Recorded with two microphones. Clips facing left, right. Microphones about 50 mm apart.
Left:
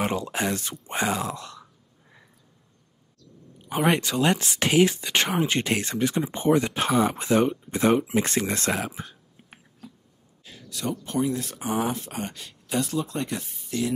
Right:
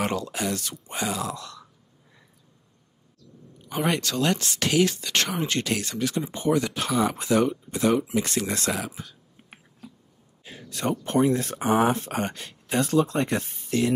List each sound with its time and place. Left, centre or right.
0.2 s speech: left
3.9 s speech: centre; by 9.1 s left
10.4 s a sound: right
10.7 s speech: right